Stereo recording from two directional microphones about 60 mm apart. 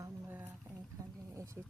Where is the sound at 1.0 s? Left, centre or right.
Right.